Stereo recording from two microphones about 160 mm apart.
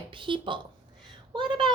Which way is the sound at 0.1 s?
30° right (ahead or behind).